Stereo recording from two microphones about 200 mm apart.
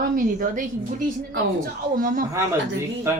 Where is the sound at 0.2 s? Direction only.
40° right (ahead or behind).